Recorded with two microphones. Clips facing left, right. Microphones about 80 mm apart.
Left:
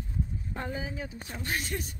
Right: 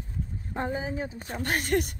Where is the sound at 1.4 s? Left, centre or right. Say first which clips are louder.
Right 8 dB; right.